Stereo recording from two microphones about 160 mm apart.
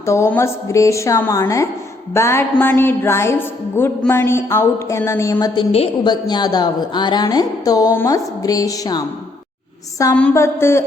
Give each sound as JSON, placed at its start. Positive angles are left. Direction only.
{"t": 0.0, "sound": "a woman's voice", "side_deg": 15}
{"t": 10.2, "sound": "a woman's voice", "side_deg": 10}